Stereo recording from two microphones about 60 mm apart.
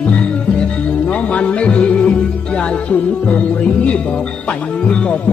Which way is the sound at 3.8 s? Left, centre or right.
Centre.